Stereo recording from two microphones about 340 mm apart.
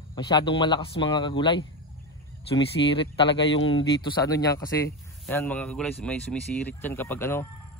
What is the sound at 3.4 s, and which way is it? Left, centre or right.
Speech, left.